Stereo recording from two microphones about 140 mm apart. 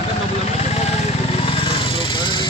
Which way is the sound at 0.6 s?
50° left (ahead or behind).